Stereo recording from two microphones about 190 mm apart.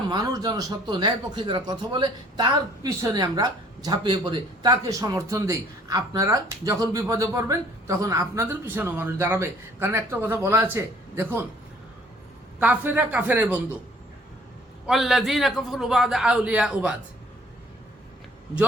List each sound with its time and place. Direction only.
0.1 s speech: 20° right (ahead or behind)
12.5 s speech: 10° right (ahead or behind)
14.8 s a man's voice: centre (ahead or behind)